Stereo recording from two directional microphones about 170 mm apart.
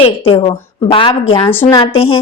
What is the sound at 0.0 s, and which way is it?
A woman's voice, 35° left (ahead or behind).